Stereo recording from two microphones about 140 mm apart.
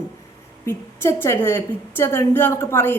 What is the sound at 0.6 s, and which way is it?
Speech, 20° left (ahead or behind).